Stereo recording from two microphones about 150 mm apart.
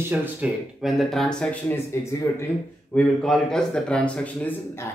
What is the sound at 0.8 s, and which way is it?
Speech, centre (ahead or behind).